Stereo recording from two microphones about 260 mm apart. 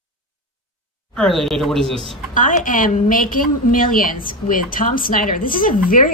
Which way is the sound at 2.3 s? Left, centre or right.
Left.